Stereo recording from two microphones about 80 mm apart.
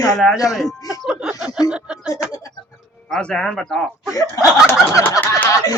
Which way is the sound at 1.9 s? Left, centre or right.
Centre.